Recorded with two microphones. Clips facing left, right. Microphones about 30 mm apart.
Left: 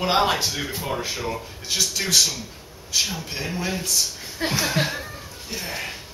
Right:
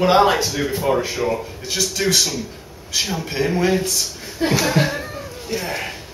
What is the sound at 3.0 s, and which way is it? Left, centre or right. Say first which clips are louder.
Speech: right 5 dB; right.